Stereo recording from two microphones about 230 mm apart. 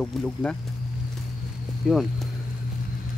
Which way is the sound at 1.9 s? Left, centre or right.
Centre.